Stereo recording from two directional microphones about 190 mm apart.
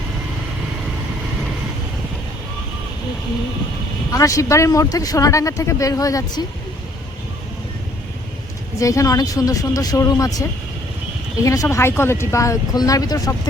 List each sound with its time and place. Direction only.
4.1 s speech: 15° left (ahead or behind)
8.8 s speech: 15° left (ahead or behind)
11.4 s speech: 15° left (ahead or behind)